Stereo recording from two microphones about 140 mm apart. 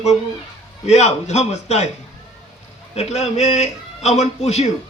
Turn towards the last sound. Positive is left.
turn(degrees=55)  # may be behind; listen again after turning